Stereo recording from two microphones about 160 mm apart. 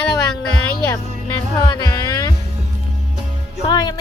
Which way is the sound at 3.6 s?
25° left (ahead or behind).